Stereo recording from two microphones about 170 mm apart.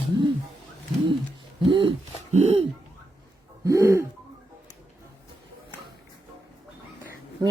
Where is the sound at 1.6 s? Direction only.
30° right (ahead or behind).